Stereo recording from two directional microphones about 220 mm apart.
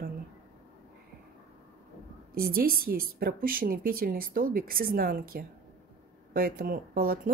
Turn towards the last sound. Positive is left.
turn(degrees=-40)  # may be behind; listen again after turning